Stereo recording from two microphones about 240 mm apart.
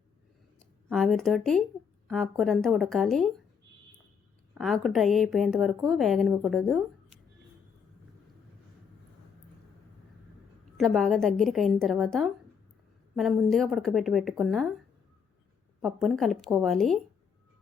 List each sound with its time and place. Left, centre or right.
0.9 s speech: centre
4.5 s speech: centre
10.8 s speech: centre
15.8 s speech: centre